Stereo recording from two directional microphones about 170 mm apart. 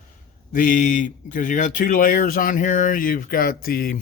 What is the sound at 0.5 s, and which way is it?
Speech, 50° left (ahead or behind).